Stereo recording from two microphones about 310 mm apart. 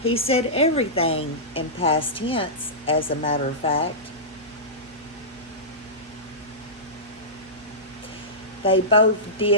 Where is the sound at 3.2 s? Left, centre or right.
Left.